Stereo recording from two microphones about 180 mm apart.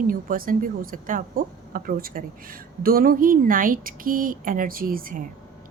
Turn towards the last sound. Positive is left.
turn(degrees=-50)  # may be behind; listen again after turning